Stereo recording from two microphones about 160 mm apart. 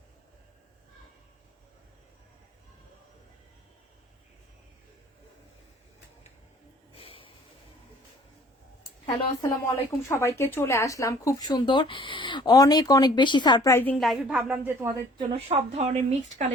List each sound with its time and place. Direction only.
6.9 s snort: 35° left (ahead or behind)
8.8 s a sound: 25° left (ahead or behind)
10.1 s speech: 15° left (ahead or behind)
14.0 s speech: 5° right (ahead or behind)
15.2 s speech: 35° right (ahead or behind)